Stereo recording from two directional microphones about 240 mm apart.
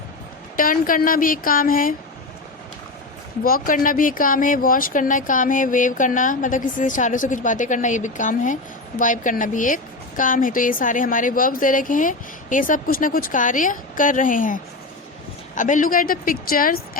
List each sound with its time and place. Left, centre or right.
0.5 s a woman's voice: left
3.4 s a woman's voice: left